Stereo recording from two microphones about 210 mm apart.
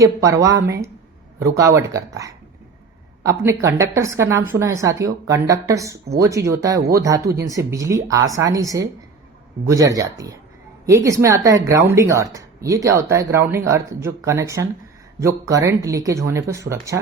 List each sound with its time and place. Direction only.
0.0 s a woman's voice: 15° right (ahead or behind)